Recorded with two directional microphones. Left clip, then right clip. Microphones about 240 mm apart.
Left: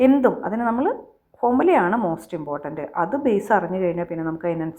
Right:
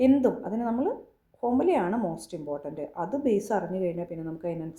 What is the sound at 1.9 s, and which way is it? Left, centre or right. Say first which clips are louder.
Speech: left 8 dB; left.